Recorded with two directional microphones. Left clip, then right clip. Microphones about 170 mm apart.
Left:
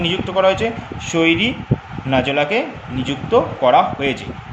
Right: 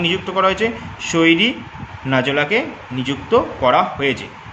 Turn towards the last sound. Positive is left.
turn(degrees=-20)  # may be behind; listen again after turning